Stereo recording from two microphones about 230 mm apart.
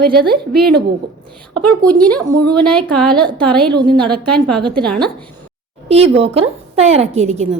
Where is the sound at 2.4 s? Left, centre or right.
Centre.